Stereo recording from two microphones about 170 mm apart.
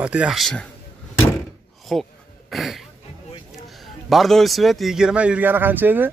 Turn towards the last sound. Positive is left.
turn(degrees=-10)  # may be behind; listen again after turning